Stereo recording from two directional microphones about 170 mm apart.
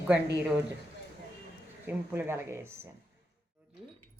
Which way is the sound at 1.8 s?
15° right (ahead or behind).